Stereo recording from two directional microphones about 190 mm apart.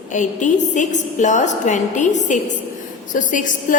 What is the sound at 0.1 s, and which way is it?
A woman's voice, 40° left (ahead or behind).